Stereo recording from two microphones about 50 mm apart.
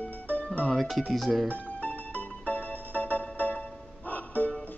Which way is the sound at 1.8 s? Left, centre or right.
Left.